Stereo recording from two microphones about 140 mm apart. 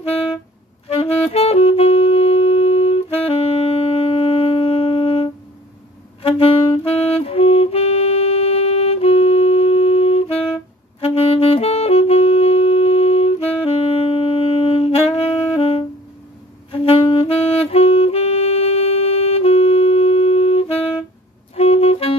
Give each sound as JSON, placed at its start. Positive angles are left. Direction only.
{"t": 0.9, "sound": "saxophone", "side_deg": 45}
{"t": 21.5, "sound": "clarinet", "side_deg": 45}